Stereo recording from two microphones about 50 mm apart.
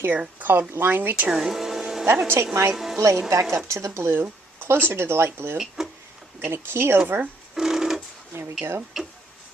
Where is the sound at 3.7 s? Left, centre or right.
Right.